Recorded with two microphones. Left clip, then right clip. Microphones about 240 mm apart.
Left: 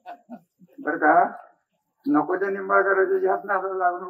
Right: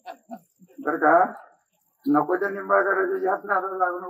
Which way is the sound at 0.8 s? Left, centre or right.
Left.